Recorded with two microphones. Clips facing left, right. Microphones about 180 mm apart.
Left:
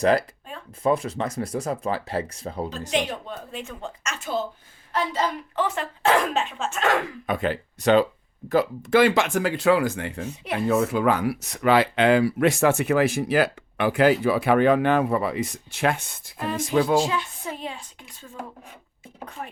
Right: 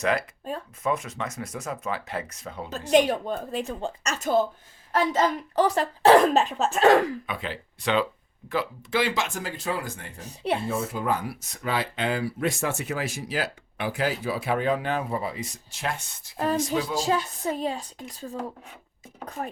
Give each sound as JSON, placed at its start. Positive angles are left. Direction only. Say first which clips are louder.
{"t": 0.0, "sound": "speech", "louder": "left 5 dB", "side_deg": 35}
{"t": 2.9, "sound": "a woman's voice", "louder": "right 8 dB", "side_deg": -40}
{"t": 7.3, "sound": "speech", "louder": "left 8 dB", "side_deg": 50}
{"t": 10.2, "sound": "a woman's voice", "louder": "right 7 dB", "side_deg": -30}
{"t": 10.7, "sound": "speech", "louder": "left 6 dB", "side_deg": 80}
{"t": 17.1, "sound": "a woman's voice", "louder": "right 4 dB", "side_deg": -40}